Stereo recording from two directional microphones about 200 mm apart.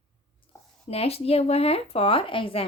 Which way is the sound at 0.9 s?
30° left (ahead or behind).